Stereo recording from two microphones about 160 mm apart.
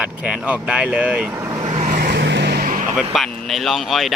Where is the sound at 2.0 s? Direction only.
90° right; by 2.8 s 60° right (ahead or behind).